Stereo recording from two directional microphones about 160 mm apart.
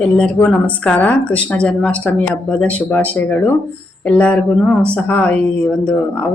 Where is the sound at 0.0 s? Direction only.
10° left (ahead or behind).